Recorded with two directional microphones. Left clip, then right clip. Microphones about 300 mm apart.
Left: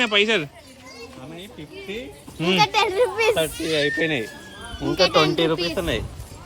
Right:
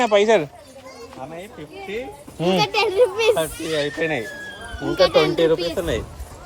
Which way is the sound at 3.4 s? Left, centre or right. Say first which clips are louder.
Left 1 dB; centre.